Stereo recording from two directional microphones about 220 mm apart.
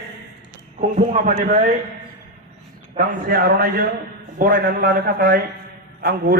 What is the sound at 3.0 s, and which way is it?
A man's voice, 45° right (ahead or behind).